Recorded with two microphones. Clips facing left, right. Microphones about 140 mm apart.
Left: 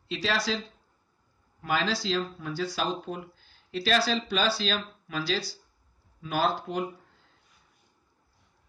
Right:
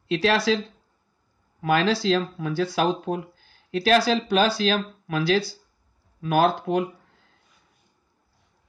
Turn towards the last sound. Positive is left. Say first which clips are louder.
# right 7 dB
turn(degrees=-65)  # may be behind; listen again after turning